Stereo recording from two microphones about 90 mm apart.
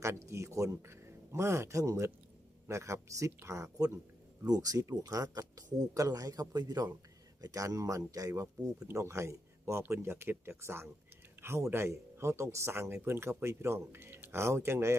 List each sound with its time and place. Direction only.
0.0 s speech: 30° right (ahead or behind)